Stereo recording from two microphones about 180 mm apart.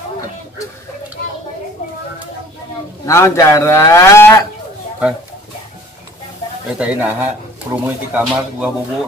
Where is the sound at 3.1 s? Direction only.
15° left (ahead or behind).